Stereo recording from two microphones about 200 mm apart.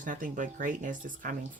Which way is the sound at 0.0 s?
40° right (ahead or behind).